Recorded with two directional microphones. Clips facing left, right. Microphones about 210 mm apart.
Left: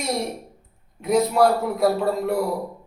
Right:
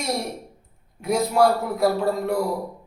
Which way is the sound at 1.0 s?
Centre (ahead or behind).